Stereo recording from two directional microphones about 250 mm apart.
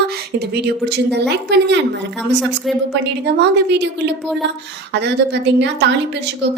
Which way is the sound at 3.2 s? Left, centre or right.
Right.